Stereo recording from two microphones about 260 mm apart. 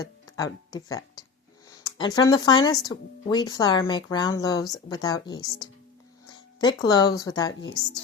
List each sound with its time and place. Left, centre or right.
0.0 s speech: centre